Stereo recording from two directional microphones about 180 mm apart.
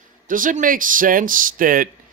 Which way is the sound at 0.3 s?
50° right (ahead or behind).